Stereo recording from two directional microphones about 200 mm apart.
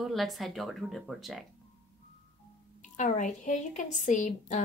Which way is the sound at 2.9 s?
35° left (ahead or behind).